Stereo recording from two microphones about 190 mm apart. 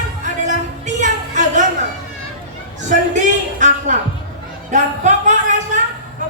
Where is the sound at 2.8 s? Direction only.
40° right (ahead or behind).